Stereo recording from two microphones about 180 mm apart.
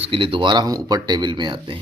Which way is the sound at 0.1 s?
30° right (ahead or behind).